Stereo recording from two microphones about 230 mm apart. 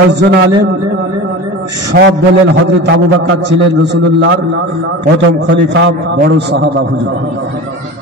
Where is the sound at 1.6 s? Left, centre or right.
Right.